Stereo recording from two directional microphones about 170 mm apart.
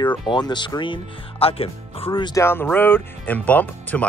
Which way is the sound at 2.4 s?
10° left (ahead or behind).